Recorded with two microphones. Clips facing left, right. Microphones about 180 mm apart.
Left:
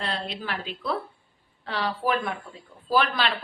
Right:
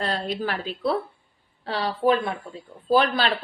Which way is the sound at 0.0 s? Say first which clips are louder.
Right 5 dB; 40° right (ahead or behind).